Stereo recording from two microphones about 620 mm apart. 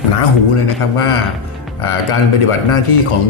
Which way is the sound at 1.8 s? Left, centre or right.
Left.